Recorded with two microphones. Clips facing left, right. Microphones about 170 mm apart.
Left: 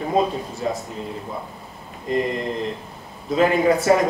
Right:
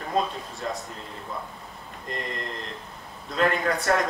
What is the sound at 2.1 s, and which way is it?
Speech, centre (ahead or behind).